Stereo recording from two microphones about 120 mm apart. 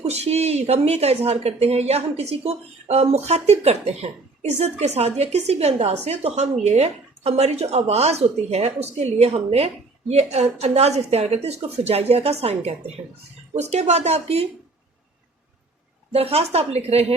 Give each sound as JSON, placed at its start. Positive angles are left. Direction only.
{"t": 0.0, "sound": "speech", "side_deg": -60}
{"t": 16.1, "sound": "speech", "side_deg": -55}